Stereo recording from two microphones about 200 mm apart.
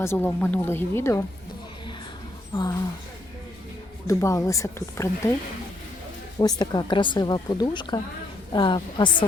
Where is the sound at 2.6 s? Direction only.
20° left (ahead or behind).